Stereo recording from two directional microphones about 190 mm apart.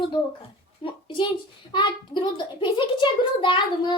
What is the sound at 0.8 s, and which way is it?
A child's voice, 25° left (ahead or behind).